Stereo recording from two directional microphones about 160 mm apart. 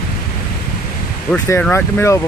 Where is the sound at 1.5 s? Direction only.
15° left (ahead or behind).